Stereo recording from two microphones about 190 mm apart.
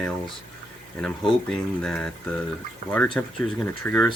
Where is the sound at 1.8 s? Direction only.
5° left (ahead or behind).